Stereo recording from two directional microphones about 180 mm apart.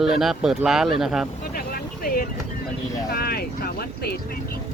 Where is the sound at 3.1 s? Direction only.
60° left (ahead or behind).